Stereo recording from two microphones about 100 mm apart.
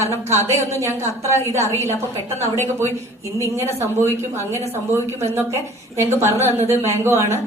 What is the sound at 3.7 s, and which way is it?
A woman's voice, 25° right (ahead or behind).